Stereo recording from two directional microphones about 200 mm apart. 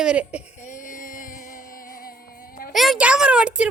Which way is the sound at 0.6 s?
40° left (ahead or behind).